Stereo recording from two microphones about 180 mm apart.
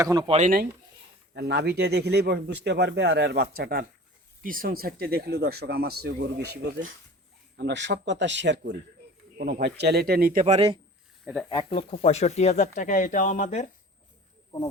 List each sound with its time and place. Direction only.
0.0 s speech: 20° right (ahead or behind)
0.3 s speech: 40° right (ahead or behind)
1.3 s speech: 65° right (ahead or behind); by 8.7 s 85° right
9.4 s speech: 65° right (ahead or behind)
10.4 s speech: 35° right (ahead or behind)
11.4 s speech: 30° left (ahead or behind)